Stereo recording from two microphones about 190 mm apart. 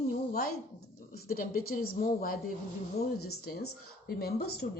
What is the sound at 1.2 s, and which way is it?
Speech, 50° left (ahead or behind).